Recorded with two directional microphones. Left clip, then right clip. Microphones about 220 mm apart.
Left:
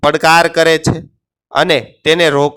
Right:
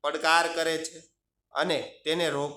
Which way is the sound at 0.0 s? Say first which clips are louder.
Left 15 dB; 45° left (ahead or behind).